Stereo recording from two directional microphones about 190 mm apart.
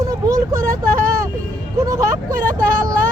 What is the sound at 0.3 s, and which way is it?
Vehicle, 15° right (ahead or behind).